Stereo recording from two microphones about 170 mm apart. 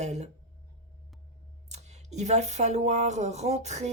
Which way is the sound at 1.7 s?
40° right (ahead or behind).